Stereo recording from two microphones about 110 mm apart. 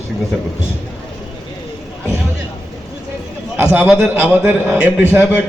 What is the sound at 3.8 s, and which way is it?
Speech, 10° right (ahead or behind).